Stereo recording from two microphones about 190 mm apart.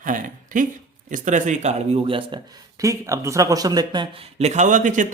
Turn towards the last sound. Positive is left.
turn(degrees=-40)  # may be behind; listen again after turning